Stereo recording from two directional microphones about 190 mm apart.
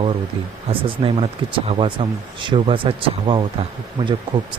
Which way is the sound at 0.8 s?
25° right (ahead or behind).